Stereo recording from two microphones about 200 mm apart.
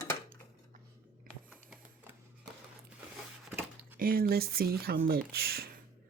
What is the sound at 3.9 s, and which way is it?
Speech, 45° right (ahead or behind).